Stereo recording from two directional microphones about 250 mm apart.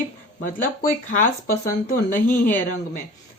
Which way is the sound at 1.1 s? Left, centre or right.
Left.